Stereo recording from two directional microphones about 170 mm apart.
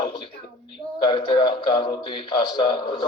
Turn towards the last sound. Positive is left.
turn(degrees=30)  # may be behind; listen again after turning